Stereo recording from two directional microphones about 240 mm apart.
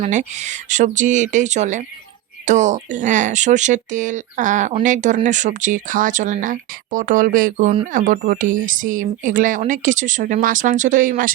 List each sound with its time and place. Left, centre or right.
0.0 s speech: right